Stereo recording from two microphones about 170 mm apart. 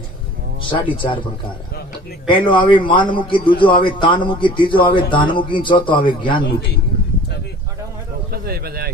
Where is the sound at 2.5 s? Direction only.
30° left (ahead or behind).